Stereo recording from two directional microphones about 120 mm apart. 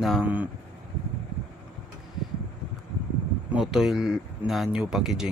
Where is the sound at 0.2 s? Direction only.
15° right (ahead or behind).